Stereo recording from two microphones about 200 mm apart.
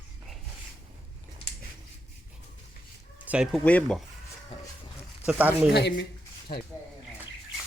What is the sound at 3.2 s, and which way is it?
Chicken, 5° right (ahead or behind).